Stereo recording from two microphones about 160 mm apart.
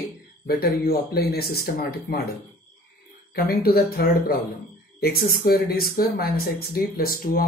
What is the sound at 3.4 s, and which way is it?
Speech, 75° left (ahead or behind).